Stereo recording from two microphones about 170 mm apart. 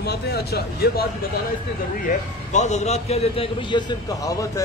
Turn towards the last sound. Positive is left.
turn(degrees=20)  # may be behind; listen again after turning